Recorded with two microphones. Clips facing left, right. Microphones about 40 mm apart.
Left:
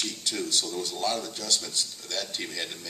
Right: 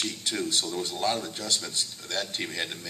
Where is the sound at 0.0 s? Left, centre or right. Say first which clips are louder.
Right 1 dB; right.